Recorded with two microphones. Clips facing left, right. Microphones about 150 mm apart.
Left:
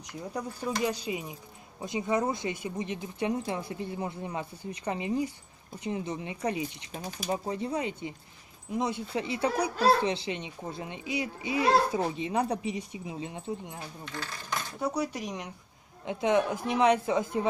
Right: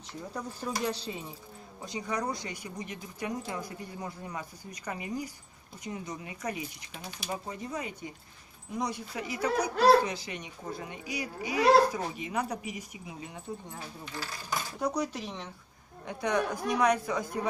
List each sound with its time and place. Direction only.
0.1 s speech: 10° left (ahead or behind)
6.9 s speech: 45° left (ahead or behind)
7.2 s speech: 25° left (ahead or behind)
14.0 s speech: 10° right (ahead or behind)
14.8 s speech: 10° left (ahead or behind); by 17.5 s 25° left (ahead or behind)